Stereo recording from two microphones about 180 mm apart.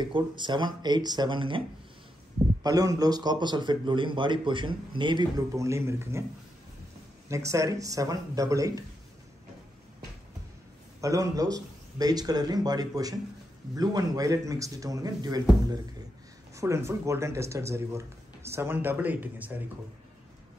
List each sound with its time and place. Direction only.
0.0 s a man's voice: 25° right (ahead or behind)
2.6 s a man's voice: 20° right (ahead or behind)
7.2 s a man's voice: 15° right (ahead or behind)
11.0 s a man's voice: 20° right (ahead or behind)
16.5 s speech: 15° right (ahead or behind)